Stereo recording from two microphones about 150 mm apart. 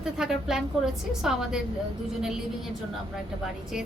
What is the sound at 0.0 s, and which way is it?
A woman's voice, 5° right (ahead or behind).